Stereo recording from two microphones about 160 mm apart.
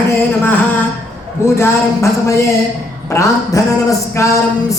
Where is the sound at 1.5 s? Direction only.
15° left (ahead or behind).